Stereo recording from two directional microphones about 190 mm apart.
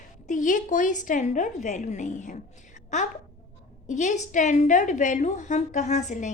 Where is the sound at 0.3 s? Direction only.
40° left (ahead or behind).